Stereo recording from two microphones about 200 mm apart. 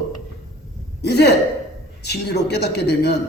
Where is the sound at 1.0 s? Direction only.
55° left (ahead or behind).